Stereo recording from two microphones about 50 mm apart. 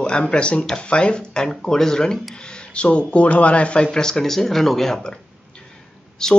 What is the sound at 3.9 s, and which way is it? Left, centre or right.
Speech, centre.